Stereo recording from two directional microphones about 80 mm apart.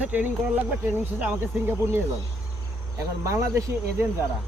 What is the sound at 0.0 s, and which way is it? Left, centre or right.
Speech, centre.